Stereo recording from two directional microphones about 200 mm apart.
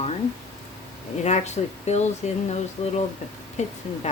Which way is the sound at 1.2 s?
35° left (ahead or behind).